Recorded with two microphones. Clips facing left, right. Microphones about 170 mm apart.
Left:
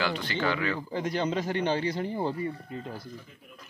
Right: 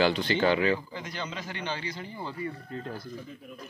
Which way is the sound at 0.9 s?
50° left (ahead or behind).